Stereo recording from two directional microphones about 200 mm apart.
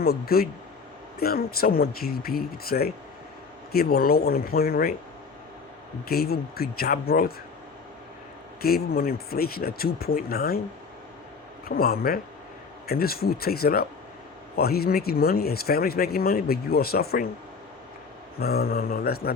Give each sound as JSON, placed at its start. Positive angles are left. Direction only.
{"t": 0.0, "sound": "speech", "side_deg": 50}
{"t": 6.1, "sound": "speech", "side_deg": 50}
{"t": 8.6, "sound": "speech", "side_deg": 50}
{"t": 11.7, "sound": "speech", "side_deg": 50}
{"t": 18.3, "sound": "speech", "side_deg": 50}